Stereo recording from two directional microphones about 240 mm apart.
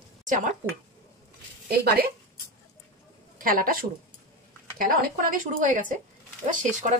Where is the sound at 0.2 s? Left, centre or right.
Right.